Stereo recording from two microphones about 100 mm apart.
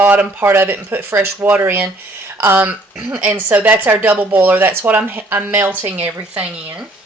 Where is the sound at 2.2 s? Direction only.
25° right (ahead or behind).